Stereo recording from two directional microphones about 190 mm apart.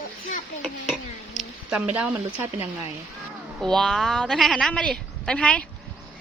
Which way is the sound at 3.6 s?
5° left (ahead or behind).